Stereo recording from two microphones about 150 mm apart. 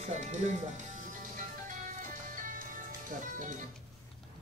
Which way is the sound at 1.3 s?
60° right (ahead or behind).